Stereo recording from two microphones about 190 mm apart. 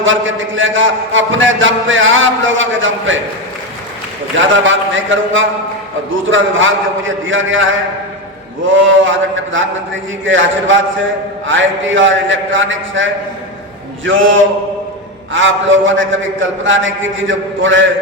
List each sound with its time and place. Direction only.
0.0 s a man's voice: 90° right
4.4 s a man's voice: 85° right